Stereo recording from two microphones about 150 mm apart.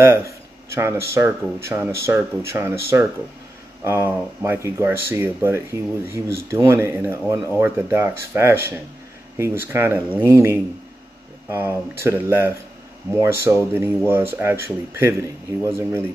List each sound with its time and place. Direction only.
0.0 s speech: 15° right (ahead or behind)